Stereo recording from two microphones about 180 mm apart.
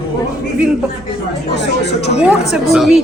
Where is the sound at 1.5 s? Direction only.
70° left (ahead or behind).